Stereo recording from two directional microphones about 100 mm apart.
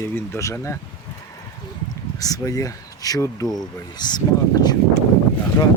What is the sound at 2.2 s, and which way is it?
Speech, 35° left (ahead or behind).